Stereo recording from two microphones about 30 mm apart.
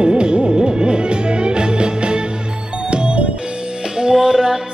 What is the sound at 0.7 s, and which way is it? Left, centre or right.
Music, right.